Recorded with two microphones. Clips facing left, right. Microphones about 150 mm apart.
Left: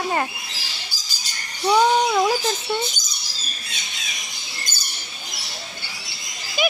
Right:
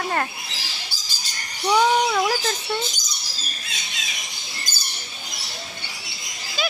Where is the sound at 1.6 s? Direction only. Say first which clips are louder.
Left 1 dB; 10° left (ahead or behind).